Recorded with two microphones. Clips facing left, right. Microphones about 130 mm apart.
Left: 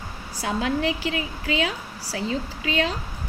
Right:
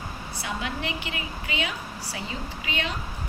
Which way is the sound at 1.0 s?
90° left.